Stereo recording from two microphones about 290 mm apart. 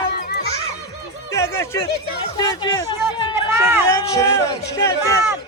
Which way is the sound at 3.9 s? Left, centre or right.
Centre.